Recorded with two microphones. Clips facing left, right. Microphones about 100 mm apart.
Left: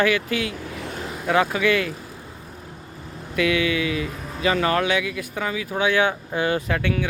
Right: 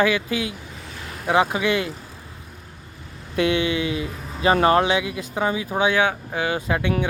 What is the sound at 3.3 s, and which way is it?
Speech, 30° right (ahead or behind).